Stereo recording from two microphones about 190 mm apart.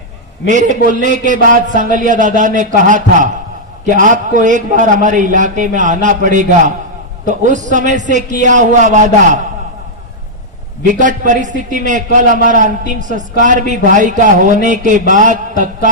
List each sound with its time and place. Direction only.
0.4 s a man's voice: 40° right (ahead or behind)
10.8 s a man's voice: 40° right (ahead or behind)